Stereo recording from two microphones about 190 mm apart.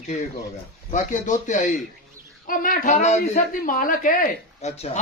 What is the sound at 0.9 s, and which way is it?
Speech, 40° left (ahead or behind).